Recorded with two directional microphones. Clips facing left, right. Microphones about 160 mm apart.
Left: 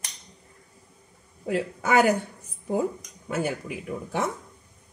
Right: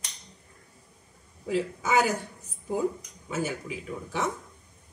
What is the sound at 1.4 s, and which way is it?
Speech, 60° left (ahead or behind).